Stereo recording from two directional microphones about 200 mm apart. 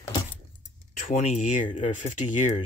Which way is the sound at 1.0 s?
40° left (ahead or behind).